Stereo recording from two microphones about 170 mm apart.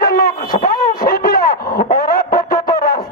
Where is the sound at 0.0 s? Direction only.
60° left (ahead or behind).